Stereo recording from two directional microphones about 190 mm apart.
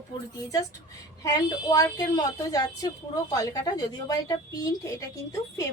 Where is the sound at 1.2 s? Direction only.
20° left (ahead or behind).